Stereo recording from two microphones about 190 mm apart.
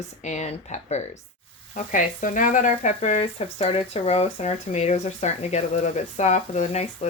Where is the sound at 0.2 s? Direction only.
35° left (ahead or behind).